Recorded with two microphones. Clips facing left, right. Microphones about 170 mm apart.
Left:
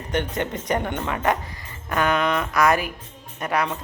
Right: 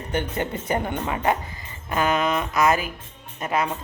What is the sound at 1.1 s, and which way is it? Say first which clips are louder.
A woman's voice: even; 25° right (ahead or behind).